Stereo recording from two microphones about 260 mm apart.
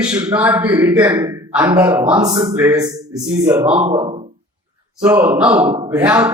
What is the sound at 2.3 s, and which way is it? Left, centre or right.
Speech, centre.